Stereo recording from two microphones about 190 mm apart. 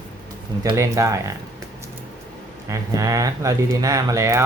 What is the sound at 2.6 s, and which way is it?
Speech, 15° right (ahead or behind).